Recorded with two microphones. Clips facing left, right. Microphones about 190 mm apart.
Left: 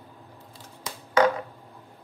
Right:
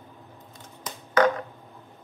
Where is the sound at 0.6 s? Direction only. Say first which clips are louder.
Even; 10° left (ahead or behind).